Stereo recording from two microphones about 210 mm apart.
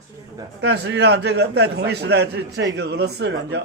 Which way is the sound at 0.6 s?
55° right (ahead or behind).